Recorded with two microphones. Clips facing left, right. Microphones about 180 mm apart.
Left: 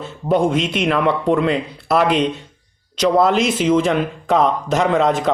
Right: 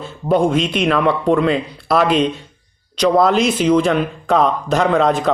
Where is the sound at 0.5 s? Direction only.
20° left (ahead or behind).